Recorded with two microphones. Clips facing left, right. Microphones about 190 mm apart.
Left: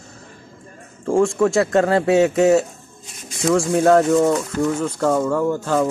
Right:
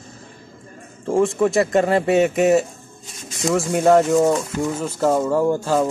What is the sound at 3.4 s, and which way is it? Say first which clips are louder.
Speech: left 1 dB; 5° right (ahead or behind).